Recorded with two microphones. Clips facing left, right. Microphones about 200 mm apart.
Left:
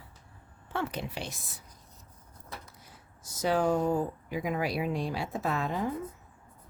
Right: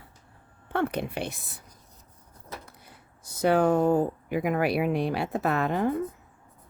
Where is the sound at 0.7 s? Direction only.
60° right (ahead or behind).